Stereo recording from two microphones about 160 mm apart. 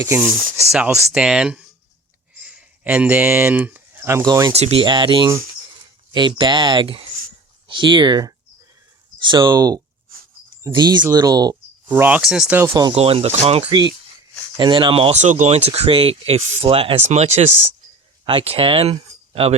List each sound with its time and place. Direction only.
0.0 s speech: 15° right (ahead or behind)
4.5 s speech: 40° right (ahead or behind)
11.9 s speech: 10° right (ahead or behind)
12.9 s speech: 35° right (ahead or behind)